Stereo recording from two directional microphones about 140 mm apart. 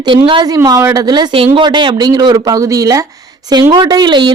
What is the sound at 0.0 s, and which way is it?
A woman's voice, 35° right (ahead or behind).